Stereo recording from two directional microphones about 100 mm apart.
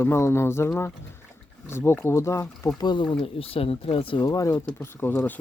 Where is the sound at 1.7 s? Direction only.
25° left (ahead or behind); by 3.1 s 55° left (ahead or behind).